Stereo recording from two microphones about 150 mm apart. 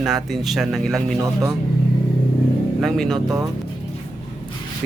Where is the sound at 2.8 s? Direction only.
5° left (ahead or behind).